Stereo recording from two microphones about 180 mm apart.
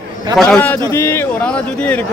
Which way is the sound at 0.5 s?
10° left (ahead or behind).